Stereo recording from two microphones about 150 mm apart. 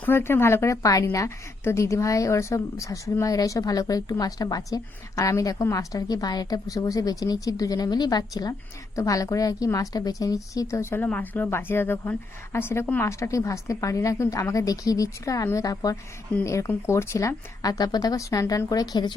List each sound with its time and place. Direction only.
0.0 s a woman's voice: 15° left (ahead or behind)